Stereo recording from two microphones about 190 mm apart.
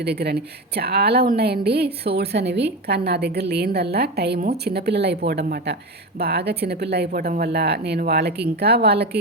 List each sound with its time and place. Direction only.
0.0 s speech: 60° right (ahead or behind)